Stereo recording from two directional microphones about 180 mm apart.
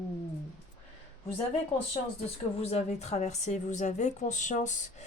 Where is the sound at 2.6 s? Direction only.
35° left (ahead or behind).